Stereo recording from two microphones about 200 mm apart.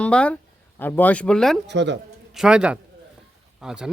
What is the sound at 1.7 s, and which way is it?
Speech, 60° right (ahead or behind).